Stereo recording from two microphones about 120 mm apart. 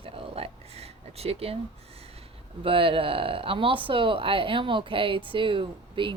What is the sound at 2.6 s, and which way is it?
Speech, 50° right (ahead or behind).